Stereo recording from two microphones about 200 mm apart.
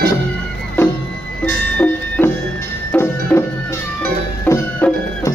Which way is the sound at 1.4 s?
10° left (ahead or behind).